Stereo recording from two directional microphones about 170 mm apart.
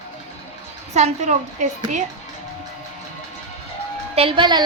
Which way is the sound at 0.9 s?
45° right (ahead or behind).